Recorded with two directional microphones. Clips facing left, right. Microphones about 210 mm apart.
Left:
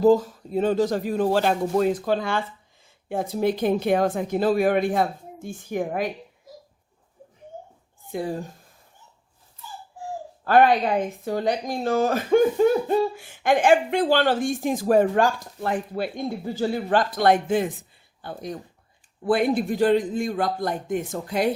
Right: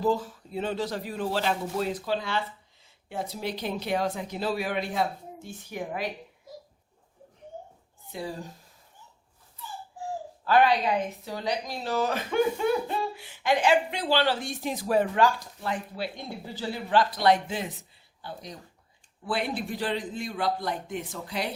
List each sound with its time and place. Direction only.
0.0 s a woman's voice: 45° left (ahead or behind)
8.1 s speech: 50° left (ahead or behind)
10.4 s a woman's voice: 50° left (ahead or behind)